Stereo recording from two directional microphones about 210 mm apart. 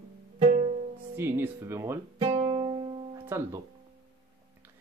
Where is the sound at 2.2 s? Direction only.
25° right (ahead or behind).